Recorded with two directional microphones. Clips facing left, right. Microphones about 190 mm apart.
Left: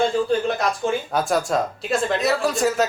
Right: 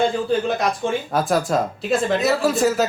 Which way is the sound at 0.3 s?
Centre (ahead or behind).